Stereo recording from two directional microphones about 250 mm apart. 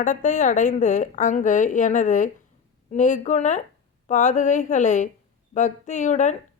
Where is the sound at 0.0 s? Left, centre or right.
Left.